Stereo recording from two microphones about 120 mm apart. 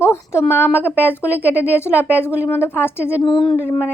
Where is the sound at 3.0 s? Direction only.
10° right (ahead or behind).